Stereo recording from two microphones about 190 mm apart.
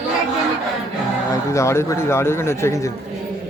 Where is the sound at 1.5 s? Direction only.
15° left (ahead or behind).